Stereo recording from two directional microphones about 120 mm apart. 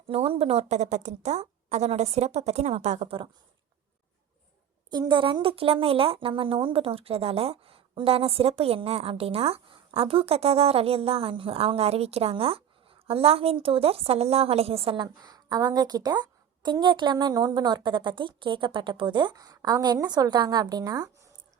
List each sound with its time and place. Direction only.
0.1 s a woman's voice: 60° right (ahead or behind)
4.9 s a woman's voice: 35° right (ahead or behind)